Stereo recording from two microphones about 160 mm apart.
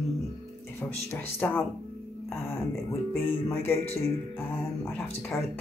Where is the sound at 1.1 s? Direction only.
10° left (ahead or behind).